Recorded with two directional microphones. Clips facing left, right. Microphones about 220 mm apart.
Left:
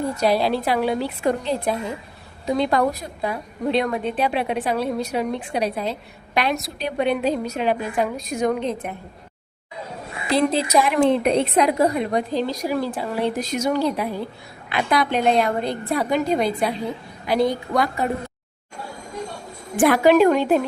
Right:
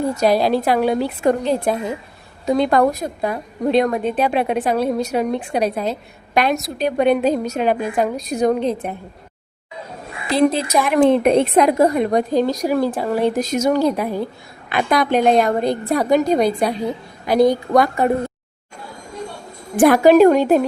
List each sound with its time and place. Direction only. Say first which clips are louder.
0.2 s a woman's voice: right 3 dB; 45° right (ahead or behind)
10.3 s speech: right 3 dB; 15° right (ahead or behind)
10.8 s a woman's voice: right 4 dB; 50° right (ahead or behind)
19.7 s a woman's voice: right 4 dB; 40° right (ahead or behind)